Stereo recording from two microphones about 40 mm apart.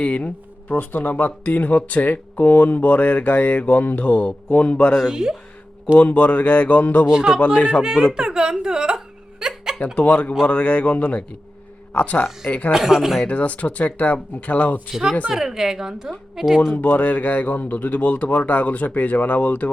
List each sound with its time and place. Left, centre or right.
0.0 s speech: left
5.1 s a woman's voice: centre
6.0 s speech: left
7.1 s a man's voice: centre
7.3 s speech: left
7.8 s a woman's voice: centre
8.1 s a sound: centre
9.8 s speech: left
12.7 s a woman's voice: centre
13.2 s speech: left
15.3 s a woman's voice: centre
16.7 s speech: left